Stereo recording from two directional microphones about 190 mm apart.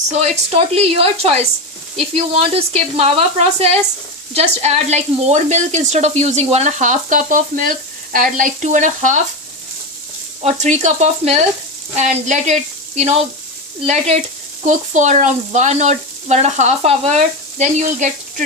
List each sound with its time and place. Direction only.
0.1 s speech: 35° right (ahead or behind)
10.4 s speech: 40° right (ahead or behind)